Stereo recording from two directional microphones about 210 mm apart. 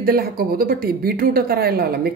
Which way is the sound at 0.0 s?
45° right (ahead or behind).